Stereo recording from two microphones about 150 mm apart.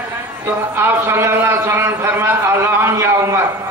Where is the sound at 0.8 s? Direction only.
15° right (ahead or behind).